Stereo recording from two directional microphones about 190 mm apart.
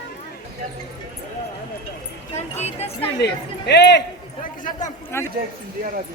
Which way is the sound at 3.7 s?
65° left (ahead or behind).